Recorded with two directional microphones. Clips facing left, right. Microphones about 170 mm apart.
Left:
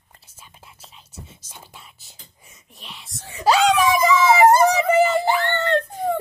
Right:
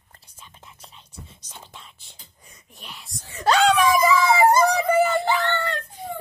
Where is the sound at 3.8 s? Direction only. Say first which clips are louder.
Left 1 dB; 25° left (ahead or behind).